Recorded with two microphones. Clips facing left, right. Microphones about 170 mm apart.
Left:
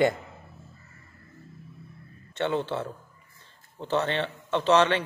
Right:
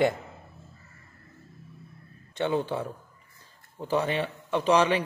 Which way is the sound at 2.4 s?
10° right (ahead or behind).